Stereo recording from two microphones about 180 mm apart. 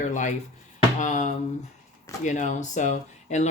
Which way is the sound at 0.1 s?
40° left (ahead or behind).